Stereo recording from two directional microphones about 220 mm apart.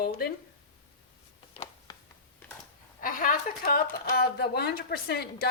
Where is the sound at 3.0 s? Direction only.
40° left (ahead or behind).